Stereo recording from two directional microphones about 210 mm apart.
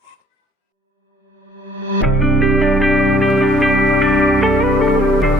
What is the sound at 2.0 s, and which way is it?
Music, centre (ahead or behind).